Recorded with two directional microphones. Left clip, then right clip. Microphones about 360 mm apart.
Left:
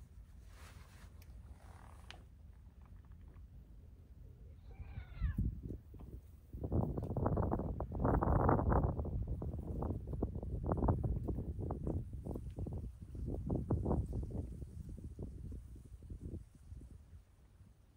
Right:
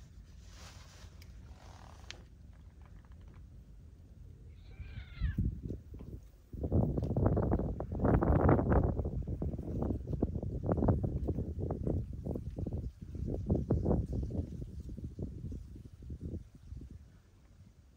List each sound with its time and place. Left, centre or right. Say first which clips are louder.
2.1 s purr: right 6 dB; centre
4.9 s cat: right 5 dB; centre
6.6 s a sound: right 5 dB; right